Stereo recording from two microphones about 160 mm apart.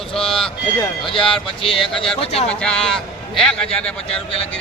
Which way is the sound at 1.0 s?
35° left (ahead or behind).